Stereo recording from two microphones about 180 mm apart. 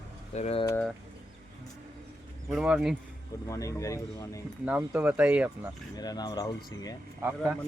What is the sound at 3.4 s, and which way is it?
Speech, 15° left (ahead or behind).